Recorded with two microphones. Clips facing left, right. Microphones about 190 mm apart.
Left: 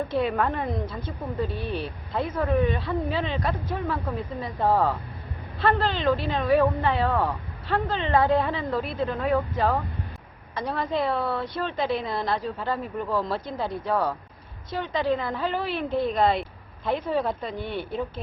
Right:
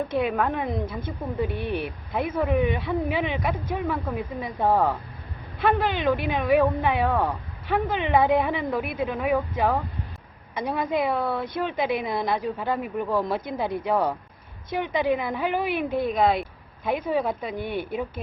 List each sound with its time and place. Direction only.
0.2 s a woman's voice: centre (ahead or behind)
1.4 s speech: 20° right (ahead or behind)
16.1 s speech: 5° right (ahead or behind)